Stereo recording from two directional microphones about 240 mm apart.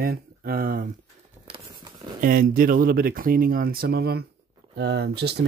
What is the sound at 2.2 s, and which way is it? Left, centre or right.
Speech, right.